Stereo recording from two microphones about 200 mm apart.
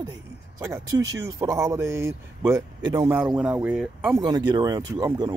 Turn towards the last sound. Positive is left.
turn(degrees=-20)  # may be behind; listen again after turning